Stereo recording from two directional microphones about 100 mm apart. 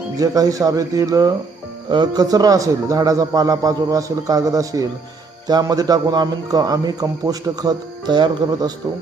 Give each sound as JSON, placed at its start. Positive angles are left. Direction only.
{"t": 0.2, "sound": "a man's voice", "side_deg": -35}